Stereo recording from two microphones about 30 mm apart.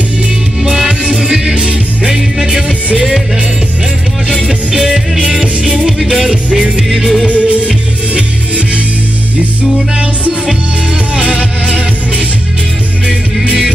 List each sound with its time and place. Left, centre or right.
0.7 s music: centre
4.5 s music: centre
5.4 s music: right
5.9 s music: centre
6.2 s music: centre
7.2 s music: right